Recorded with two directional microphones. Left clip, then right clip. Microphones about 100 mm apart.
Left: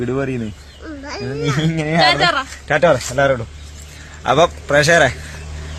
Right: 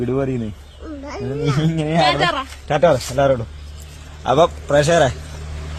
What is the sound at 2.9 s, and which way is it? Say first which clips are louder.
Speech: left 1 dB; 55° left (ahead or behind).